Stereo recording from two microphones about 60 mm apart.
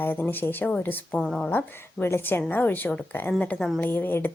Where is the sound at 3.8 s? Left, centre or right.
Left.